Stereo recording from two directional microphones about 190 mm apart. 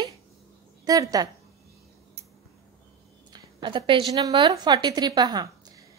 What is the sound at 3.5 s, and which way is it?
A woman's voice, 25° right (ahead or behind).